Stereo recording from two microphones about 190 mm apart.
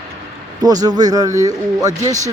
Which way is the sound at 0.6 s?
20° right (ahead or behind).